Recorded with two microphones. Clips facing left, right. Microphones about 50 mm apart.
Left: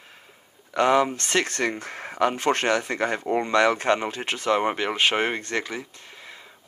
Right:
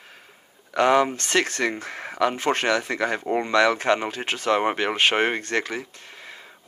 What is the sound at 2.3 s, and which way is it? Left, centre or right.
Speech, right.